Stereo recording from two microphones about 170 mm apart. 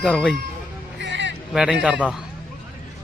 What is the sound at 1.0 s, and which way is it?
Music, 90° right.